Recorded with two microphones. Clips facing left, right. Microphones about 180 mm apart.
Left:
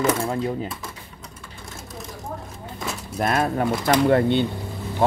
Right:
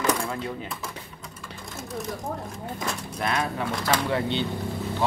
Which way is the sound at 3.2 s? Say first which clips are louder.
Left 6 dB; 45° left (ahead or behind).